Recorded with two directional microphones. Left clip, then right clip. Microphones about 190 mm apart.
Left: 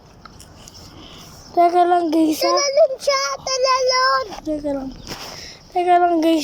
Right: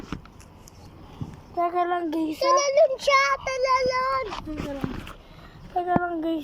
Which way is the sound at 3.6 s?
50° left (ahead or behind).